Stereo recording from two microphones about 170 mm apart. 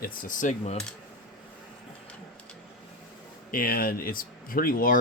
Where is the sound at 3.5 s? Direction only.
60° left (ahead or behind).